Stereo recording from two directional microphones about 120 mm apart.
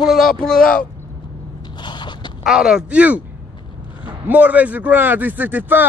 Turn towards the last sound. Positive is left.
turn(degrees=-15)  # may be behind; listen again after turning